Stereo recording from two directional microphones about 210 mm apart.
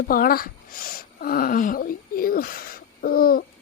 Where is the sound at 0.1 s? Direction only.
45° left (ahead or behind).